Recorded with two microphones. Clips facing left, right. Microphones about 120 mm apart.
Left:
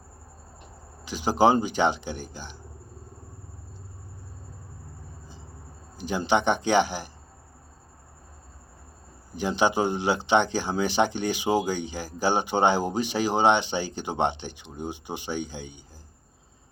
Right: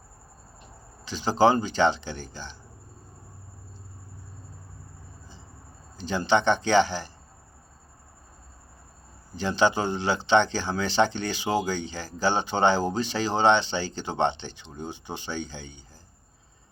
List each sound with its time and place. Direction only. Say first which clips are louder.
1.0 s speech: even; 15° left (ahead or behind)
6.0 s speech: right 1 dB; 15° left (ahead or behind)
9.3 s speech: even; 15° left (ahead or behind)